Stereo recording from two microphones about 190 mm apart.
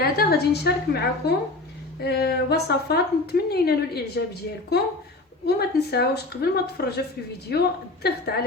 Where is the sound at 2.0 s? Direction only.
55° left (ahead or behind).